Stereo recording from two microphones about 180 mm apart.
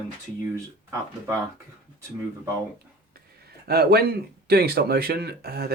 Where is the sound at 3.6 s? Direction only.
60° right (ahead or behind).